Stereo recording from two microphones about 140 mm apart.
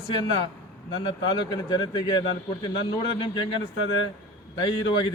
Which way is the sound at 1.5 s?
35° left (ahead or behind).